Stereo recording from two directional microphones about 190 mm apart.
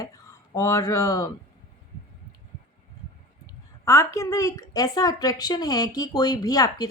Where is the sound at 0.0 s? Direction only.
15° left (ahead or behind).